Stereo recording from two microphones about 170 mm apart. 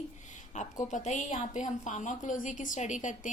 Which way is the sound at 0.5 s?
45° left (ahead or behind).